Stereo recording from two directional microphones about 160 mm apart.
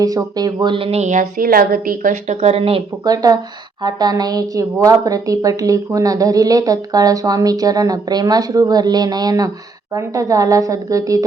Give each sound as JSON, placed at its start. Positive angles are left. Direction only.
{"t": 0.0, "sound": "speech", "side_deg": -25}
{"t": 3.1, "sound": "a woman's voice", "side_deg": -25}